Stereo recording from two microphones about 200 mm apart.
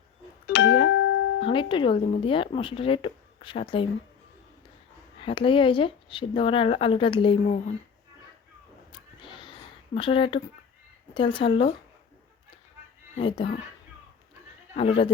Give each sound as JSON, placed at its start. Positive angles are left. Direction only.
{"t": 0.4, "sound": "music", "side_deg": 60}
{"t": 1.5, "sound": "speech", "side_deg": 25}
{"t": 5.2, "sound": "speech", "side_deg": 25}
{"t": 8.9, "sound": "a sound", "side_deg": 25}
{"t": 9.9, "sound": "speech", "side_deg": 25}
{"t": 13.1, "sound": "speech", "side_deg": 25}
{"t": 14.8, "sound": "speech", "side_deg": 25}